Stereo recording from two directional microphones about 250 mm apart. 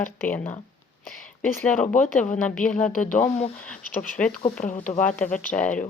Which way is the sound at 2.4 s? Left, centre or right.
Centre.